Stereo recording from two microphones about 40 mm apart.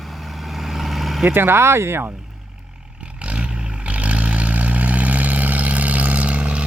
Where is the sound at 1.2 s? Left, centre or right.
Right.